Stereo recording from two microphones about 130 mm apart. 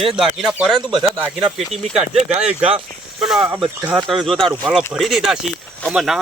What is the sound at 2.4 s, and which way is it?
Speech, 10° right (ahead or behind).